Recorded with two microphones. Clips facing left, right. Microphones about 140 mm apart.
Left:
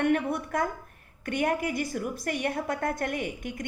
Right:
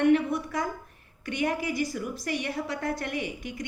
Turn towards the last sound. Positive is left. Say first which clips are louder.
# even
turn(degrees=50)  # may be behind; listen again after turning